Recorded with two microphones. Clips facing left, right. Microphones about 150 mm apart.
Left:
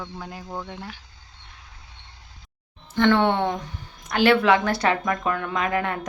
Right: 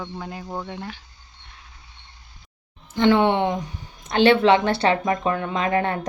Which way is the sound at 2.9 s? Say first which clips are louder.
Right 2 dB; 15° right (ahead or behind).